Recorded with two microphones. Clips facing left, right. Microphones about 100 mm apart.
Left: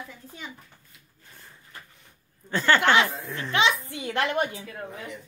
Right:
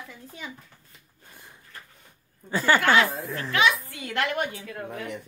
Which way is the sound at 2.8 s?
20° left (ahead or behind).